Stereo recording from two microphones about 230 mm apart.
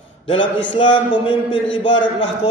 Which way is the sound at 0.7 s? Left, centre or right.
Left.